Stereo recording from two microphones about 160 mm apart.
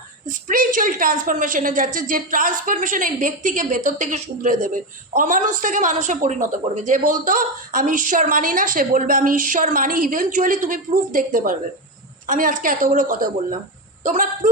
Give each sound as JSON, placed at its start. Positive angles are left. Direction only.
{"t": 0.3, "sound": "a woman's voice", "side_deg": -55}